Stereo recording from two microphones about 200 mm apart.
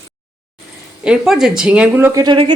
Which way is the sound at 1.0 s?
5° right (ahead or behind).